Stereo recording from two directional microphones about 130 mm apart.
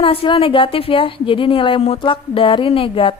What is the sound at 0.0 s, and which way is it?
A woman's voice, 45° left (ahead or behind).